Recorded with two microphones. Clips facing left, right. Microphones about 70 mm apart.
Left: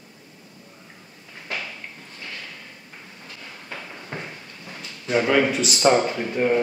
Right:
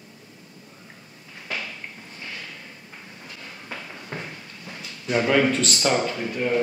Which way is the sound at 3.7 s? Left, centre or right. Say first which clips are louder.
Even; centre.